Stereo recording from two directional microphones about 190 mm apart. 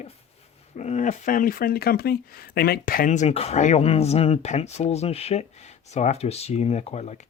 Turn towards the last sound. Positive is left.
turn(degrees=35)  # may be behind; listen again after turning